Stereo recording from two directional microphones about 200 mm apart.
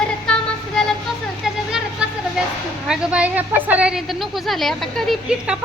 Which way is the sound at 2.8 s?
5° right (ahead or behind).